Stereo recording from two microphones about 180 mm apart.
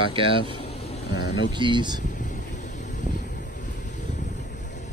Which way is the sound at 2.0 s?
45° left (ahead or behind).